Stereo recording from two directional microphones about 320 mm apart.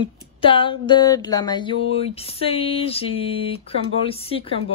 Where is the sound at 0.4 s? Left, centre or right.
Centre.